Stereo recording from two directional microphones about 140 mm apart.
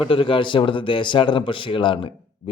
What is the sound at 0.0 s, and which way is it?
Speech, 40° left (ahead or behind).